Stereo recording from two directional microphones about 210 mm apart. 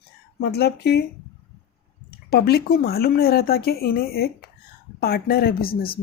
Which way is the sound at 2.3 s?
50° left (ahead or behind).